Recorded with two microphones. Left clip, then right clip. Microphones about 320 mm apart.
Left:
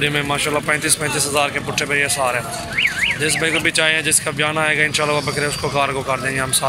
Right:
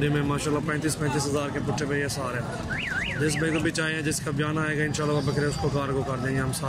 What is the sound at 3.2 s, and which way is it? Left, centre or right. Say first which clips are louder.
Speech: left 6 dB; centre.